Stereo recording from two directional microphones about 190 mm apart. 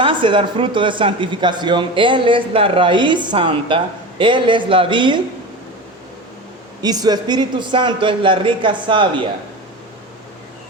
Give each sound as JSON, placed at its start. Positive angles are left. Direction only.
{"t": 0.0, "sound": "speech", "side_deg": -25}
{"t": 6.8, "sound": "speech", "side_deg": -20}